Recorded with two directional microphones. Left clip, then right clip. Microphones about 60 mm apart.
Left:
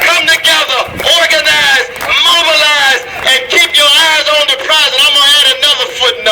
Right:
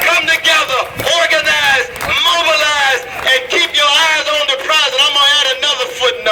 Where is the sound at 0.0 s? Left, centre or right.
Left.